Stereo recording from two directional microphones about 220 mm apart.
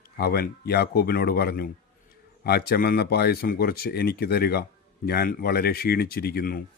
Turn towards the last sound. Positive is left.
turn(degrees=45)  # may be behind; listen again after turning